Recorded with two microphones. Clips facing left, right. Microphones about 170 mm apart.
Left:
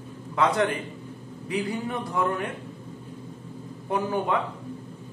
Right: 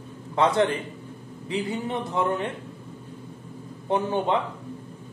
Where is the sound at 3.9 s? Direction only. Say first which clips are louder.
Right 2 dB; 25° right (ahead or behind).